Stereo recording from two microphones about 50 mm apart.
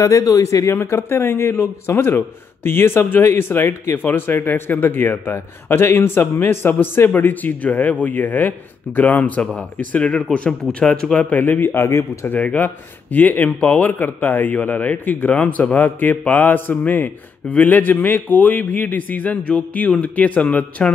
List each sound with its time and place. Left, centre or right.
0.0 s a man's voice: left
9.4 s a man's voice: left
11.1 s a man's voice: left
11.6 s speech: left
12.5 s a man's voice: left